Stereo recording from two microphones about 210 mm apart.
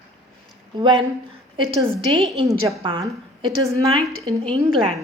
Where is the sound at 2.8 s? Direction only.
25° right (ahead or behind).